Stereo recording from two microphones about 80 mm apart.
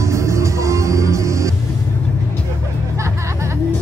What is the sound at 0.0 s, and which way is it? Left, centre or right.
Music, right.